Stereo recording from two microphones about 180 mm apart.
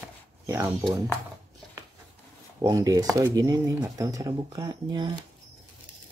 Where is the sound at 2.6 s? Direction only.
20° right (ahead or behind).